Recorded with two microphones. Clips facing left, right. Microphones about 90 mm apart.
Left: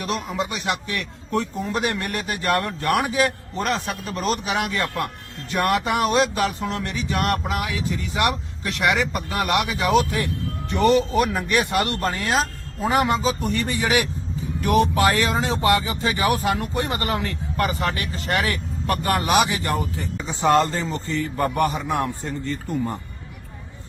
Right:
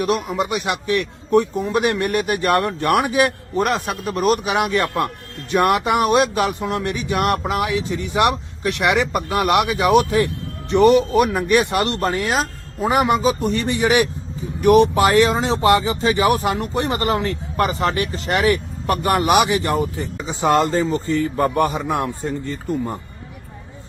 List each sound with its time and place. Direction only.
0.0 s a man's voice: 10° right (ahead or behind)
20.1 s speech: centre (ahead or behind)
20.7 s speech: 15° right (ahead or behind)